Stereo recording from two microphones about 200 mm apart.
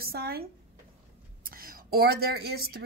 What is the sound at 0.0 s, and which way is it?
Speech, 50° right (ahead or behind).